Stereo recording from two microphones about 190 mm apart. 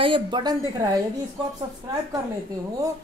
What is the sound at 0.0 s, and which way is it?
Speech, 25° right (ahead or behind).